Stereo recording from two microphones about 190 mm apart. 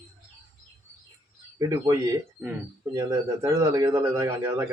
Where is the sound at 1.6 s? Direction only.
15° right (ahead or behind).